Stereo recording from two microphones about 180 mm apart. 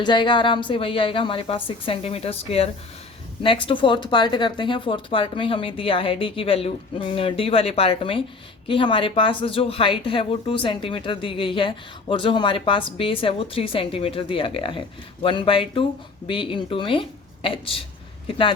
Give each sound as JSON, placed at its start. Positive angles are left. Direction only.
{"t": 0.0, "sound": "speech", "side_deg": 25}